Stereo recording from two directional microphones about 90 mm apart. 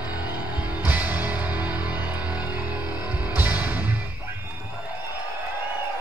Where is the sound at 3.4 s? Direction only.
15° right (ahead or behind).